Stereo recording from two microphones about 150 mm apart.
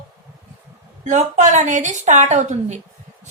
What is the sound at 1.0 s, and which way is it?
A woman's voice, 55° right (ahead or behind).